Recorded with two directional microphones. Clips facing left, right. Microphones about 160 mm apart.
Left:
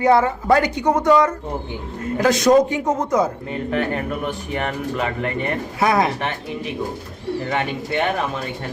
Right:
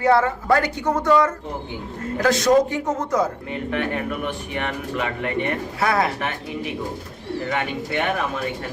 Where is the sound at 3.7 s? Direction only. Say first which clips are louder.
Left 2 dB; 40° left (ahead or behind).